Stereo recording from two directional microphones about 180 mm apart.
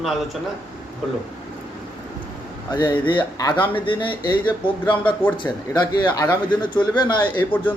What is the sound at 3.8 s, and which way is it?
Speech, 25° left (ahead or behind).